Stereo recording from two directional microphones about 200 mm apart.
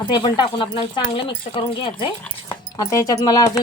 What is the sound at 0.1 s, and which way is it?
Speech, 20° left (ahead or behind).